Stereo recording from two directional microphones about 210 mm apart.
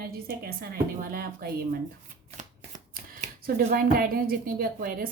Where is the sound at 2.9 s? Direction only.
40° right (ahead or behind).